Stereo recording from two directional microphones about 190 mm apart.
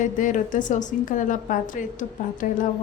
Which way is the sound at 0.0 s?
45° left (ahead or behind).